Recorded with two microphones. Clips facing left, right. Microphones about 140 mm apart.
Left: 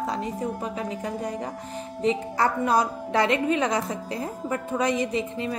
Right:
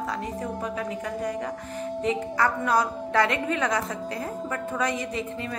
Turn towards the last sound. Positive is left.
turn(degrees=20)  # may be behind; listen again after turning